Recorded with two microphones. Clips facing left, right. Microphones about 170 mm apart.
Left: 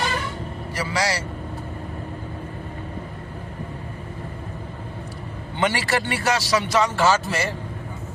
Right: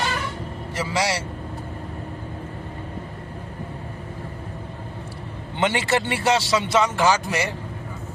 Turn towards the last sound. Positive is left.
turn(degrees=-20)  # may be behind; listen again after turning